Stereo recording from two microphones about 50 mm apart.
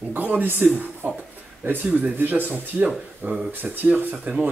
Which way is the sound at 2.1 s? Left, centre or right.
Right.